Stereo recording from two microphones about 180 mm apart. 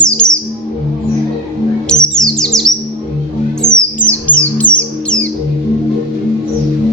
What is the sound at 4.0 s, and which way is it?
Music, 10° left (ahead or behind).